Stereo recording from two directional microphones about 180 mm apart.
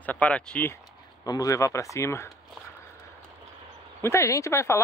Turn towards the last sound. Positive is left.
turn(degrees=15)  # may be behind; listen again after turning